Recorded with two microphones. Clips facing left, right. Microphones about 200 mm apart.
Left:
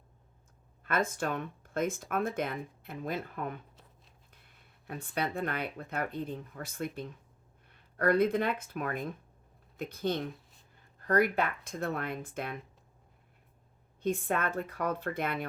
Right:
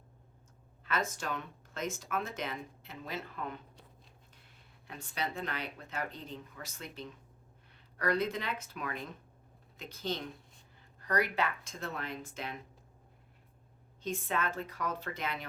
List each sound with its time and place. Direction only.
0.9 s speech: 55° left (ahead or behind)
4.9 s speech: 55° left (ahead or behind)
14.0 s speech: 55° left (ahead or behind)